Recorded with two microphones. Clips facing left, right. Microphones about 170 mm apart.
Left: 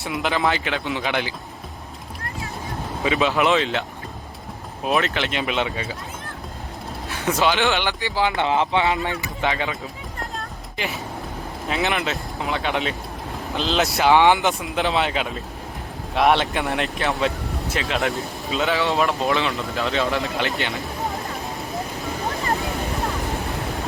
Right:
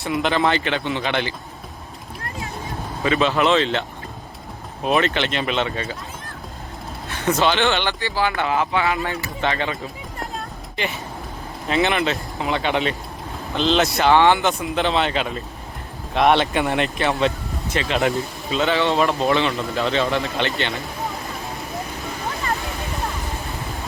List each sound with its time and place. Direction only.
0.0 s speech: 5° left (ahead or behind)
3.0 s speech: 15° left (ahead or behind)
4.9 s speech: centre (ahead or behind)
7.1 s speech: centre (ahead or behind)
11.7 s speech: centre (ahead or behind)
14.1 s speech: 15° left (ahead or behind)
14.6 s speech: centre (ahead or behind)
21.7 s a sound: centre (ahead or behind)
22.3 s a sound: 35° left (ahead or behind)
22.5 s vehicle: centre (ahead or behind)